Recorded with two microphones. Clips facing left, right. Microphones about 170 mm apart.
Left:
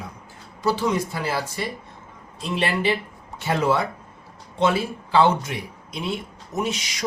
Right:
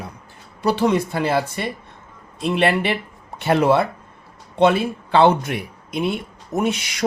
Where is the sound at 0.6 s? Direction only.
60° right (ahead or behind).